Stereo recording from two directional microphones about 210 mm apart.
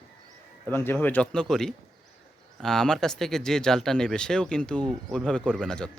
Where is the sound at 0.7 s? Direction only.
10° left (ahead or behind).